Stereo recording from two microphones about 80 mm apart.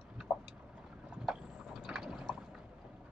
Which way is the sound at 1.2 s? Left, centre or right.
Centre.